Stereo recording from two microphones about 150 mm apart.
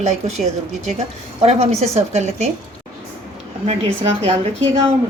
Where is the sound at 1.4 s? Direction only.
45° right (ahead or behind).